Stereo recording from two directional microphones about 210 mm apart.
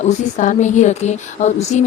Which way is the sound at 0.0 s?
35° left (ahead or behind).